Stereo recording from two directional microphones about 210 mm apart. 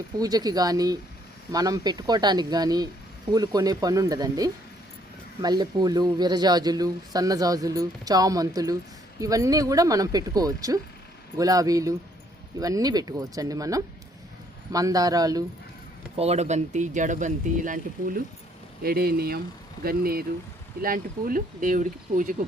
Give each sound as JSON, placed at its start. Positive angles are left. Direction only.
{"t": 0.2, "sound": "speech", "side_deg": -20}
{"t": 16.1, "sound": "speech", "side_deg": -30}